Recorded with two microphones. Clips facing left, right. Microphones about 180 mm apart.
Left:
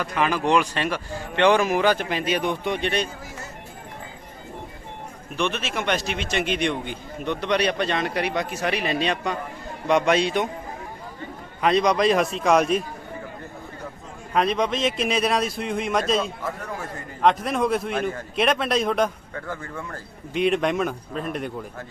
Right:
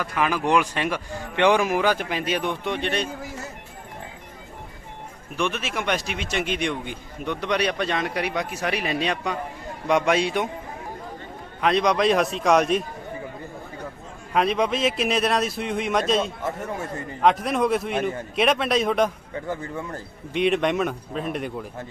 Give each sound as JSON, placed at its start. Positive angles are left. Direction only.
{"t": 0.0, "sound": "speech", "side_deg": -5}
{"t": 5.4, "sound": "a man's voice", "side_deg": -10}
{"t": 11.6, "sound": "a man's voice", "side_deg": 0}
{"t": 14.3, "sound": "a man's voice", "side_deg": -5}
{"t": 16.4, "sound": "a man's voice", "side_deg": -25}
{"t": 17.2, "sound": "a man's voice", "side_deg": 0}
{"t": 19.4, "sound": "speech", "side_deg": -20}
{"t": 20.3, "sound": "a man's voice", "side_deg": 0}